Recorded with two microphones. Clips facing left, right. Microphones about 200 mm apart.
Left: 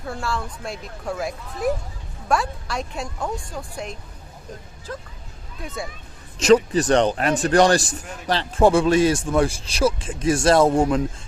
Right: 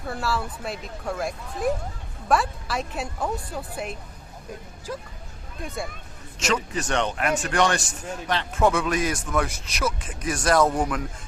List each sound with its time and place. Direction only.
0.0 s speech: centre (ahead or behind)
5.6 s speech: centre (ahead or behind)
6.4 s a man's voice: 35° left (ahead or behind)